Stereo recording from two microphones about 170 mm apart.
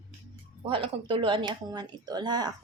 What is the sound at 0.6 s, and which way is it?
Speech, 30° right (ahead or behind).